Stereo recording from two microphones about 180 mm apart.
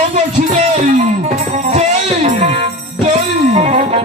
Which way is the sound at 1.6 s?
35° right (ahead or behind).